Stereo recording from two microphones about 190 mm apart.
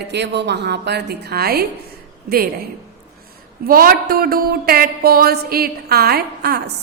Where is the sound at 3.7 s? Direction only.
50° right (ahead or behind).